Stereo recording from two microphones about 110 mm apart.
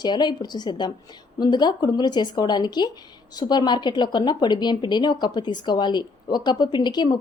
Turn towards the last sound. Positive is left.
turn(degrees=40)  # may be behind; listen again after turning